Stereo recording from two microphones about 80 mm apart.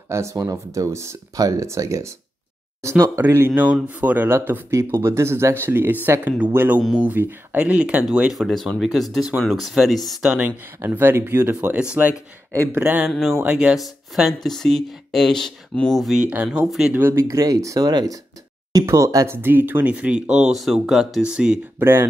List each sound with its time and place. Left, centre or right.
0.1 s speech: right
3.6 s speech: centre
10.9 s speech: right
11.7 s speech: centre
13.1 s speech: centre
16.2 s speech: centre
16.5 s speech: centre
16.9 s speech: right
19.2 s speech: right
21.7 s speech: right